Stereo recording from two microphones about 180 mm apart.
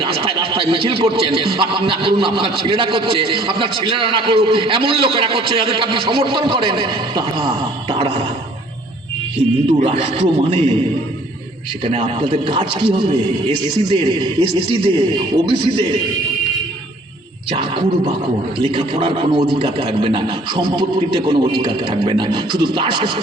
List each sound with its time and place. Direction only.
0.0 s speech: 30° right (ahead or behind)
9.6 s a man's voice: 35° right (ahead or behind)
11.8 s speech: 30° right (ahead or behind)
17.6 s speech: 30° right (ahead or behind)